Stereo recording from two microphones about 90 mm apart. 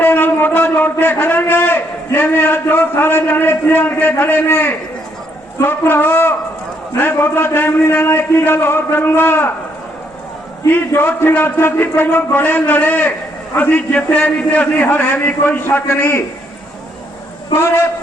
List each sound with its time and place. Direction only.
0.0 s a man's voice: 20° left (ahead or behind)
10.7 s a man's voice: 20° left (ahead or behind)